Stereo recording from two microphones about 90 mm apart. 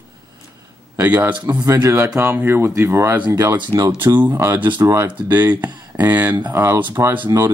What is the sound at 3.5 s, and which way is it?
Speech, 50° right (ahead or behind).